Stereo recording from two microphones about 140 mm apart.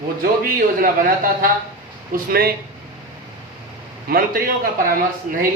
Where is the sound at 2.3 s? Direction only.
90° right.